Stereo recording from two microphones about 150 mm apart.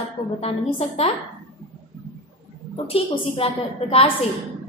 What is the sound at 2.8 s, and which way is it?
A woman's voice, 40° left (ahead or behind).